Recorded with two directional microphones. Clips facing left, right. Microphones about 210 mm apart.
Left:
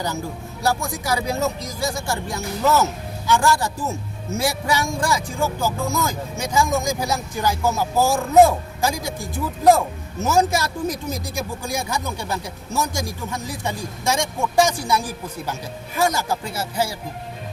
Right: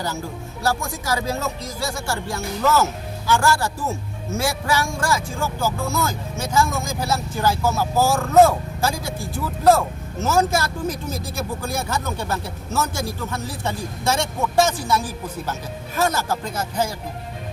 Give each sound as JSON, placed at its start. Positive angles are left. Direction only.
{"t": 0.6, "sound": "a man's voice", "side_deg": 15}